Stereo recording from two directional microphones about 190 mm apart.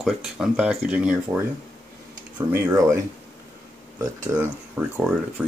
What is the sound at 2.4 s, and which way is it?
Speech, 20° right (ahead or behind).